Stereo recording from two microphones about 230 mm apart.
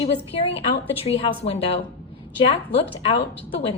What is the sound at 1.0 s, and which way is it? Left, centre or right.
A woman's voice, left.